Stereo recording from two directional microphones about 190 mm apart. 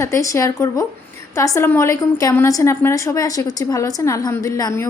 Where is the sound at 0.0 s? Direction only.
15° left (ahead or behind).